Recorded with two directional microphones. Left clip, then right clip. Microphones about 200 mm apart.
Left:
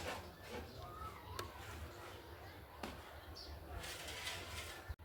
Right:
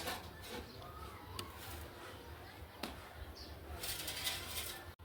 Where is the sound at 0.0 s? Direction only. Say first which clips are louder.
Right 3 dB; 50° right (ahead or behind).